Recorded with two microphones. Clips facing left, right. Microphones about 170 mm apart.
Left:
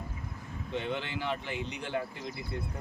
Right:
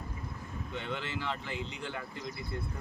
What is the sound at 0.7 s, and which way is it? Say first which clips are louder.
Speech: left 4 dB; 20° left (ahead or behind).